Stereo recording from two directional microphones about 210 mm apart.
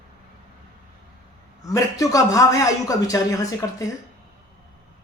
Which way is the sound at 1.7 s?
15° left (ahead or behind).